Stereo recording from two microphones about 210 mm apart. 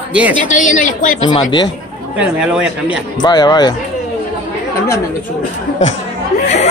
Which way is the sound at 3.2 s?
20° left (ahead or behind).